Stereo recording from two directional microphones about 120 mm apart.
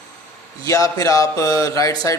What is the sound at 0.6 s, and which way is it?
Speech, 30° left (ahead or behind).